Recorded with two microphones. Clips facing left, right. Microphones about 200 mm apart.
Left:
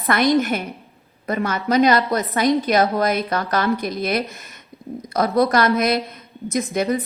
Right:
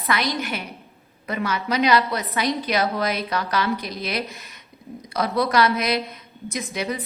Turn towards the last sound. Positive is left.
turn(degrees=50)  # may be behind; listen again after turning